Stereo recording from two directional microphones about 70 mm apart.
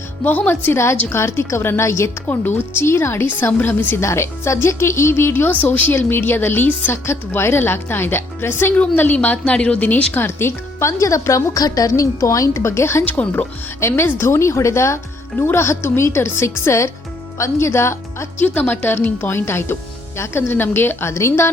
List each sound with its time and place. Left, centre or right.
0.3 s a woman's voice: left
2.2 s a woman's voice: left
4.0 s a woman's voice: left
5.5 s a woman's voice: left
6.9 s a woman's voice: left
10.2 s speech: left
11.0 s a woman's voice: left
11.6 s a woman's voice: left
13.1 s a woman's voice: left
13.8 s a woman's voice: left
18.3 s a woman's voice: left
21.1 s a woman's voice: left